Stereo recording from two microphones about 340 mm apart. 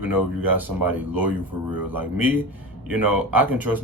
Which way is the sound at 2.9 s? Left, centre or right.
Centre.